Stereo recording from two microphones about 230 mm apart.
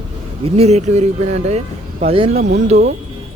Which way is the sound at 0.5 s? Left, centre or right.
Right.